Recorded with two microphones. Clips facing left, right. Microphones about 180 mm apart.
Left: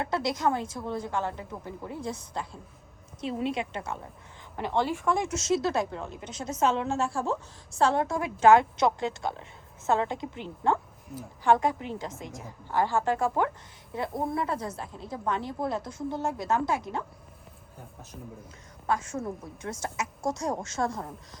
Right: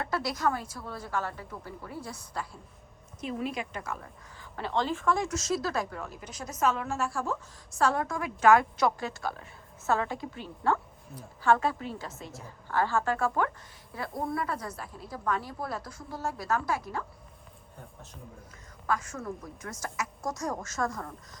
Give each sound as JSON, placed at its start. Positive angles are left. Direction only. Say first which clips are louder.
{"t": 0.0, "sound": "a woman's voice", "louder": "left 2 dB", "side_deg": 20}
{"t": 4.5, "sound": "a woman's voice", "louder": "left 2 dB", "side_deg": 15}
{"t": 18.9, "sound": "a woman's voice", "louder": "left 2 dB", "side_deg": 25}